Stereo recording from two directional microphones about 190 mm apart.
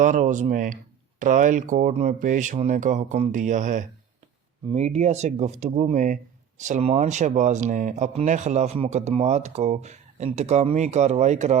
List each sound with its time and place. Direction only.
0.0 s speech: 40° right (ahead or behind)